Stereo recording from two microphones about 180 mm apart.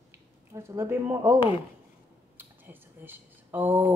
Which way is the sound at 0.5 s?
15° right (ahead or behind).